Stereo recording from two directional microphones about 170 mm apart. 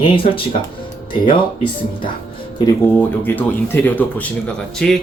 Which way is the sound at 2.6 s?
10° left (ahead or behind).